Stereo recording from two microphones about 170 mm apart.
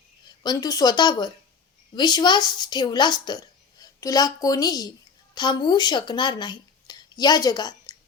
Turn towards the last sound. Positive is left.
turn(degrees=25)  # may be behind; listen again after turning